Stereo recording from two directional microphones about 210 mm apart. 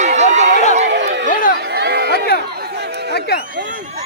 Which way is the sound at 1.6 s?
50° right (ahead or behind).